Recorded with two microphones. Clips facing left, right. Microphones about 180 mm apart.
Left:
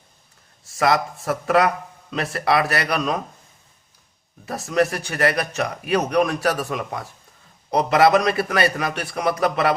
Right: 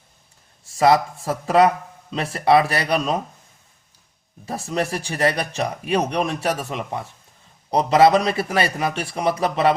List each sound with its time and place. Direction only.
0.7 s speech: 30° right (ahead or behind)
4.4 s speech: 30° right (ahead or behind)